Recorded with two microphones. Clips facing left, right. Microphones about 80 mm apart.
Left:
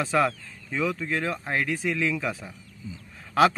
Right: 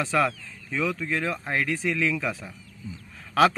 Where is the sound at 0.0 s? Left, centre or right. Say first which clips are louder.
Left 1 dB; centre.